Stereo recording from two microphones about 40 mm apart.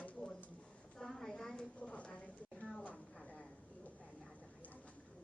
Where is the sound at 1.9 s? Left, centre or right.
Left.